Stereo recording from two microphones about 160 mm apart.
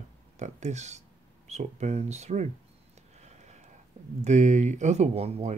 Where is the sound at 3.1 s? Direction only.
45° right (ahead or behind).